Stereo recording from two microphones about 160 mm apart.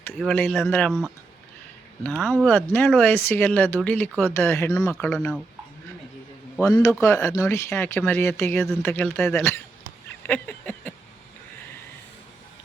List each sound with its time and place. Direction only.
0.1 s speech: centre (ahead or behind)
0.6 s speech: 15° left (ahead or behind)
2.0 s speech: 5° left (ahead or behind)
6.6 s speech: 20° left (ahead or behind)
10.2 s a sound: 10° left (ahead or behind)